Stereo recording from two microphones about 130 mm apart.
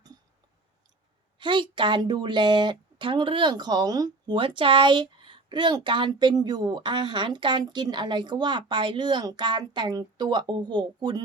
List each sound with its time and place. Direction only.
1.4 s speech: 40° right (ahead or behind)